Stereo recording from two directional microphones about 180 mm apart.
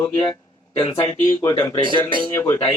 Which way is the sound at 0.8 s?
25° left (ahead or behind).